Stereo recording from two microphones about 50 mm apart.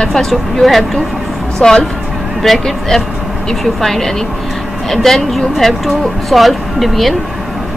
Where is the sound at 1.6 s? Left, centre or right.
Centre.